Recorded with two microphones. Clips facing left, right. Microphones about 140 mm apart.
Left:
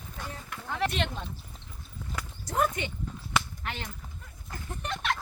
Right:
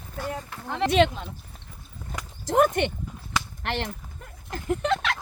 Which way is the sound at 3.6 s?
75° right (ahead or behind).